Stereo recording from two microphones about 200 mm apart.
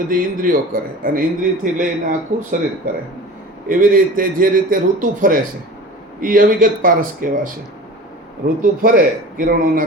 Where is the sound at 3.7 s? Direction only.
45° right (ahead or behind).